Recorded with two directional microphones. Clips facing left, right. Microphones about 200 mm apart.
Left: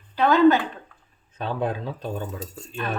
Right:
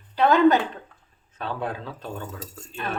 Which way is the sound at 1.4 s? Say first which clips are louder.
Left 4 dB; 20° left (ahead or behind).